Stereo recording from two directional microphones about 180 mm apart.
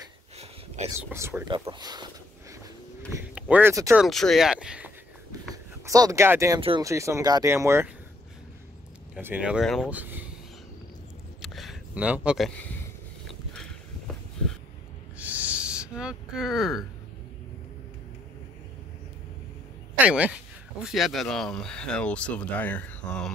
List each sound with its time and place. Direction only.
0.8 s speech: 15° right (ahead or behind)
3.3 s speech: 10° right (ahead or behind)
3.9 s speech: centre (ahead or behind)
5.5 s speech: 20° right (ahead or behind)
9.1 s speech: 10° right (ahead or behind)
11.4 s a sound: centre (ahead or behind)
13.3 s vehicle: 5° left (ahead or behind)
15.1 s owl: 10° right (ahead or behind)
20.1 s speech: 5° right (ahead or behind)